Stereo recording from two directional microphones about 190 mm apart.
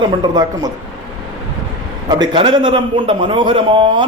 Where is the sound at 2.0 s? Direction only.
25° right (ahead or behind).